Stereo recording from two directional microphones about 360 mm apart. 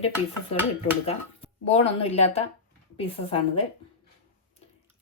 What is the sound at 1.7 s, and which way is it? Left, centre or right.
Speech, centre.